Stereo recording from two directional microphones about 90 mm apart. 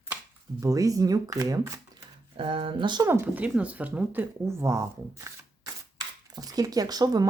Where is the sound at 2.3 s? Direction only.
70° right (ahead or behind).